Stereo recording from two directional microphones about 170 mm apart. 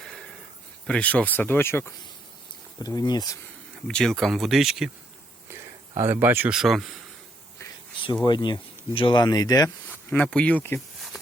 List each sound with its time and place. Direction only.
0.0 s a sound: centre (ahead or behind)
0.9 s speech: 5° left (ahead or behind); by 3.3 s 25° left (ahead or behind)
3.8 s speech: centre (ahead or behind)
5.5 s speech: 15° right (ahead or behind)
8.2 s speech: 25° left (ahead or behind)
9.6 s speech: 10° left (ahead or behind)